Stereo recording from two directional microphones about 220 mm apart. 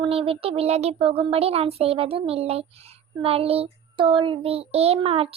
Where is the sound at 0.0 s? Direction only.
25° right (ahead or behind).